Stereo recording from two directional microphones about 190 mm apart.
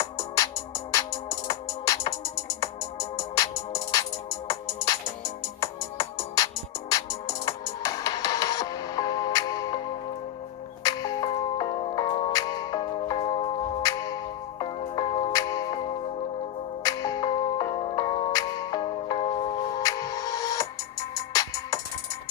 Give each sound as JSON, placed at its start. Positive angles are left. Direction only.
{"t": 0.0, "sound": "music", "side_deg": 15}
{"t": 10.8, "sound": "music", "side_deg": 20}